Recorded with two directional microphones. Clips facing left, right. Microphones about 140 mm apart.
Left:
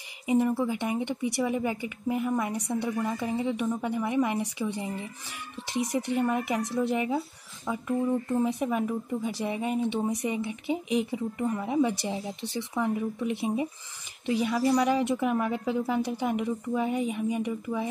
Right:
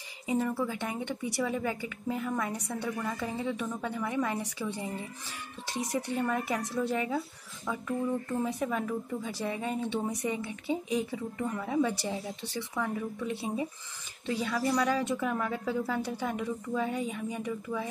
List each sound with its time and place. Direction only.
0.3 s speech: 15° left (ahead or behind)